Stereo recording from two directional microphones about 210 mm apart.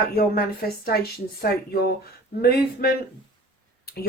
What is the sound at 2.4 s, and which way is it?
Speech, 45° left (ahead or behind).